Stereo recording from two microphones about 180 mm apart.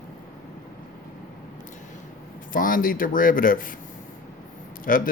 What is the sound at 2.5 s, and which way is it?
Speech, 50° left (ahead or behind).